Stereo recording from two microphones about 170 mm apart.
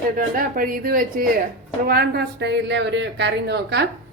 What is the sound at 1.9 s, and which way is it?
Speech, 70° right (ahead or behind).